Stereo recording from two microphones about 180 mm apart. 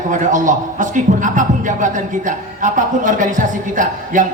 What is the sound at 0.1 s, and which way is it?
A man's voice, 45° right (ahead or behind).